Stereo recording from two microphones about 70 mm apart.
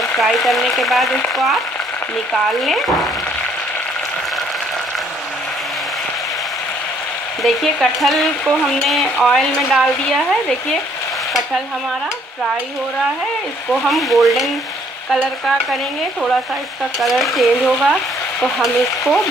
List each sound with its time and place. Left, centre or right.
0.2 s speech: centre
2.3 s speech: centre
7.4 s speech: centre
13.8 s speech: centre
17.0 s speech: centre